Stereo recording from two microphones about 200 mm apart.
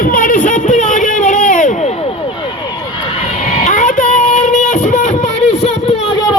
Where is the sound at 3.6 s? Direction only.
40° left (ahead or behind).